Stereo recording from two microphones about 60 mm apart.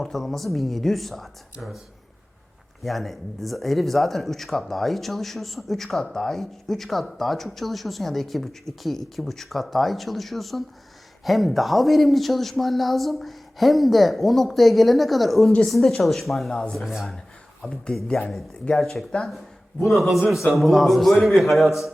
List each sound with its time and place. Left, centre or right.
0.0 s speech: centre
2.8 s speech: centre
17.6 s speech: centre
18.7 s speech: centre